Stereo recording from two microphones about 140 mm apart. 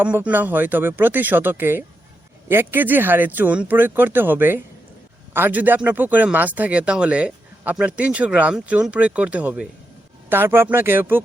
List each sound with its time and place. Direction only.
0.0 s speech: 10° right (ahead or behind)